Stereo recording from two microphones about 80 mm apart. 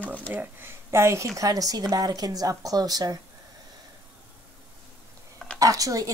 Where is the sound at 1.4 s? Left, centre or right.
Right.